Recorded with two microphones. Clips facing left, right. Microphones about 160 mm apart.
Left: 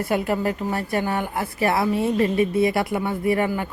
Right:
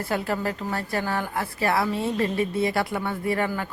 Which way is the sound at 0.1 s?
20° left (ahead or behind).